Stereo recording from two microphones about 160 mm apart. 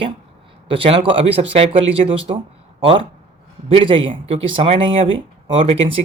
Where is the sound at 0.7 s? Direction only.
35° right (ahead or behind).